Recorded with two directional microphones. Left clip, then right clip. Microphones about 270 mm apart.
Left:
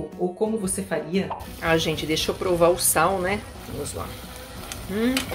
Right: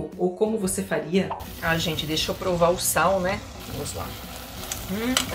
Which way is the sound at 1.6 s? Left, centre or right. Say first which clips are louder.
Left 3 dB; left.